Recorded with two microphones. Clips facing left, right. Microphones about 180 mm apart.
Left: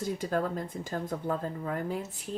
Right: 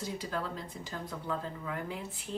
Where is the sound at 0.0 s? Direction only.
50° left (ahead or behind).